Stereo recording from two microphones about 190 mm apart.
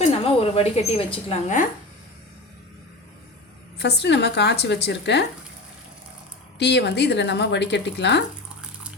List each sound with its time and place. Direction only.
0.1 s speech: 30° left (ahead or behind)
3.8 s speech: 60° left (ahead or behind)
6.6 s speech: 65° left (ahead or behind)